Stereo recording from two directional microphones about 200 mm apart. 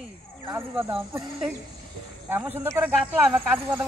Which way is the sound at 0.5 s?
10° right (ahead or behind).